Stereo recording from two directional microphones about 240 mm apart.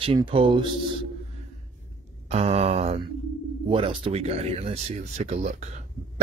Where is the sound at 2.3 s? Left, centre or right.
Right.